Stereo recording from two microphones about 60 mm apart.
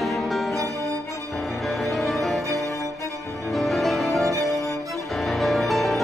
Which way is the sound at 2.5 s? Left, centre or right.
Left.